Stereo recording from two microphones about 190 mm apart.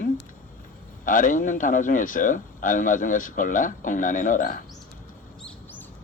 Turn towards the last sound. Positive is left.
turn(degrees=10)  # may be behind; listen again after turning